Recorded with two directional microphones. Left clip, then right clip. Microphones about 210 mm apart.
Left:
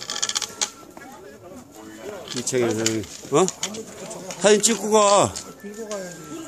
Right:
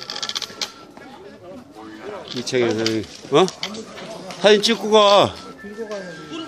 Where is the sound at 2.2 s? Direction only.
25° left (ahead or behind).